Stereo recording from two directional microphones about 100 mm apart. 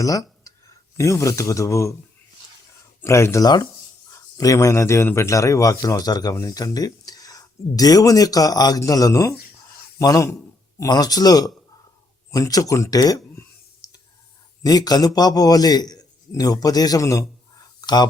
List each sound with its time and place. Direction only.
0.0 s a sound: 35° left (ahead or behind)
0.9 s a man's voice: 30° left (ahead or behind)
3.0 s speech: 30° left (ahead or behind)
3.4 s a man's voice: 40° left (ahead or behind)
13.8 s clicking: 40° left (ahead or behind)
14.6 s a man's voice: 40° left (ahead or behind)